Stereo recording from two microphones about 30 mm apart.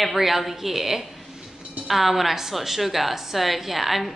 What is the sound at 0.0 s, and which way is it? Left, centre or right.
A woman's voice, centre.